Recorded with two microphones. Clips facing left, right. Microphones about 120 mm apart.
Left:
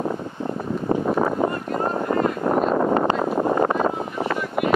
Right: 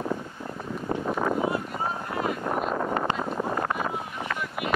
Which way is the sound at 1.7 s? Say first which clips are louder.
Left 8 dB; 60° left (ahead or behind).